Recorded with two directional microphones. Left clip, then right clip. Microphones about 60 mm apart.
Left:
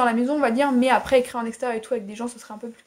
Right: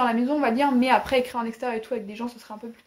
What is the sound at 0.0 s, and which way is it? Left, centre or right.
Speech, left.